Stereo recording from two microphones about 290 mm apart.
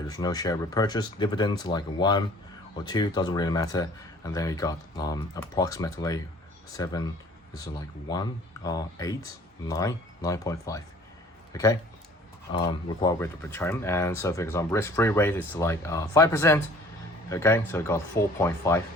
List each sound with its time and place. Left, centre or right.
0.1 s speech: centre